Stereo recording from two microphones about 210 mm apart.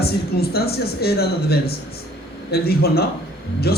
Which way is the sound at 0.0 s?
50° left (ahead or behind).